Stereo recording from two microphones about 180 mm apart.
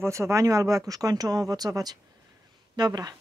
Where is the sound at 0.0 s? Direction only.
15° right (ahead or behind).